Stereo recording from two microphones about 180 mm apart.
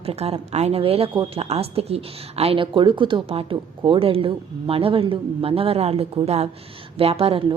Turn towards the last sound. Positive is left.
turn(degrees=-30)  # may be behind; listen again after turning